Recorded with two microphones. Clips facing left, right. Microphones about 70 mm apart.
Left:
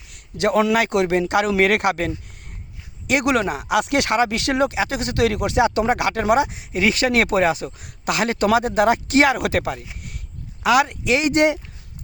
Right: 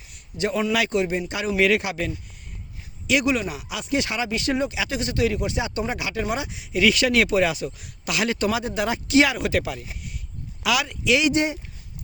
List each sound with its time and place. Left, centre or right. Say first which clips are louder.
0.1 s a sound: left 6 dB; left
0.7 s speech: left 4 dB; left
0.9 s speech: left 6 dB; left
1.5 s speech: left 3 dB; left
3.2 s speech: left 5 dB; left
4.7 s speech: left 4 dB; left
11.3 s speech: left 6 dB; left